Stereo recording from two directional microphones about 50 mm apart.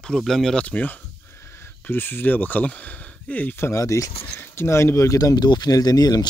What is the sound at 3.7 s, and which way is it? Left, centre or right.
Speech, left.